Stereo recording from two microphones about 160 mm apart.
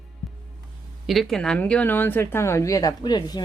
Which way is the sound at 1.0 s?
Centre (ahead or behind).